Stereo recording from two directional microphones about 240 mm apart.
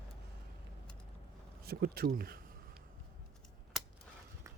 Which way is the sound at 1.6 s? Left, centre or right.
Right.